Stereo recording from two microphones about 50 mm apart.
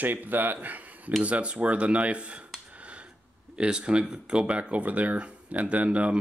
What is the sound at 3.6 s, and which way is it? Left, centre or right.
Speech, centre.